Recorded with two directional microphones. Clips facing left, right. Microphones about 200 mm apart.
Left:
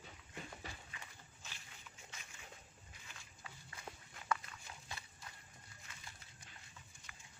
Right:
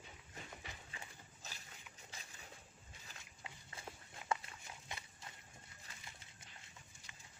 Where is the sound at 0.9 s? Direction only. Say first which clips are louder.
Right 2 dB; 40° right (ahead or behind).